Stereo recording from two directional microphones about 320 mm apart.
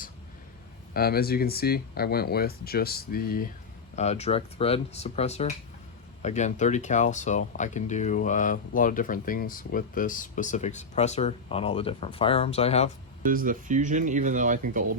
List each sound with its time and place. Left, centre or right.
0.9 s speech: left
13.2 s speech: right